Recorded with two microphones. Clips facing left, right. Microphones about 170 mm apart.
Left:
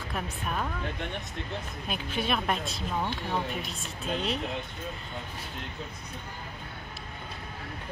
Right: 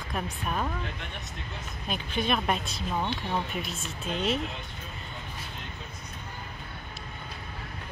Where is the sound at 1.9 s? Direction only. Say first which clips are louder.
Right 2 dB; 5° left (ahead or behind).